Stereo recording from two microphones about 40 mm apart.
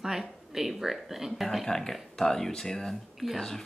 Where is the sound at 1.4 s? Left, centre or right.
Centre.